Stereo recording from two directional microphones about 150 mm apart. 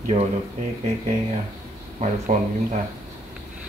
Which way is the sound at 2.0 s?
55° right (ahead or behind).